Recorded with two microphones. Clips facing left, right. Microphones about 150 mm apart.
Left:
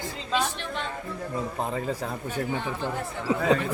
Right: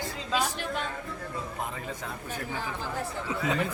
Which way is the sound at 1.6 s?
35° left (ahead or behind).